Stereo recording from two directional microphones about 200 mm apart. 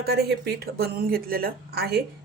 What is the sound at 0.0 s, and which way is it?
Speech, 55° right (ahead or behind).